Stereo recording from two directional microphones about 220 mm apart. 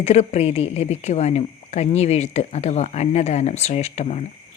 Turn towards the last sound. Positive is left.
turn(degrees=30)  # may be behind; listen again after turning